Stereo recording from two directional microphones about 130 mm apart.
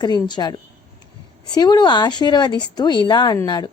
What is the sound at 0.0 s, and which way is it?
Speech, 35° left (ahead or behind).